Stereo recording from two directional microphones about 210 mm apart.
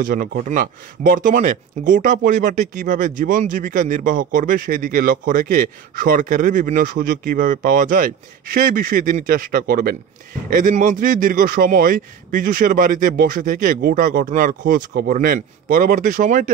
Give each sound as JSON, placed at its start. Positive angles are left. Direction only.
{"t": 0.0, "sound": "speech", "side_deg": -40}